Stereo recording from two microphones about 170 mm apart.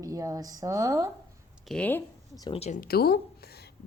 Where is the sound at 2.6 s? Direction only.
50° left (ahead or behind); by 3.7 s 70° left (ahead or behind).